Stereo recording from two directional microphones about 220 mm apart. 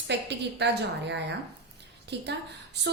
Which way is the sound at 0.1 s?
50° right (ahead or behind).